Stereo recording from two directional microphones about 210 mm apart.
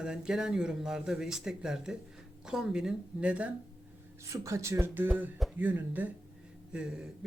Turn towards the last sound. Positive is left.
turn(degrees=-5)  # may be behind; listen again after turning